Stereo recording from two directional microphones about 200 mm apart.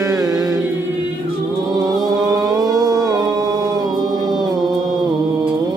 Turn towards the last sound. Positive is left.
turn(degrees=-20)  # may be behind; listen again after turning